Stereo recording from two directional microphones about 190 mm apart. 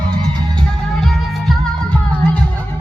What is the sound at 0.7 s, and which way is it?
Music, centre (ahead or behind).